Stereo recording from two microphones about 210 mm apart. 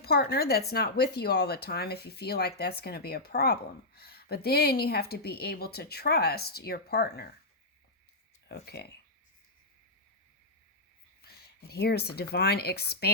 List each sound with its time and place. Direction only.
0.0 s speech: 50° left (ahead or behind)
8.4 s speech: 50° left (ahead or behind)
11.7 s speech: 50° left (ahead or behind)